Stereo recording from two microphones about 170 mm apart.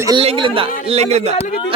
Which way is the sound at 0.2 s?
30° right (ahead or behind).